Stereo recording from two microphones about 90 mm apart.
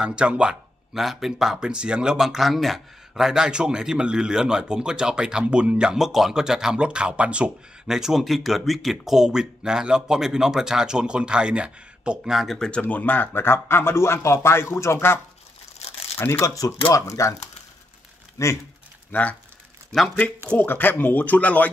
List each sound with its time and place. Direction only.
0.0 s speech: 10° right (ahead or behind); by 12.8 s 5° left (ahead or behind)
12.8 s speech: 20° left (ahead or behind)
16.2 s speech: 30° left (ahead or behind)
18.4 s speech: 35° left (ahead or behind)
19.1 s speech: 20° left (ahead or behind)
20.5 s speech: 20° left (ahead or behind)